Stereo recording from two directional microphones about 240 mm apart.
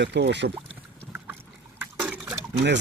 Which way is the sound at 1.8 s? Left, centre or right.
Centre.